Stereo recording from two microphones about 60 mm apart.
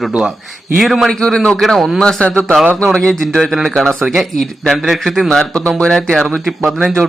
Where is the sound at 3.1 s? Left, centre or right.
Centre.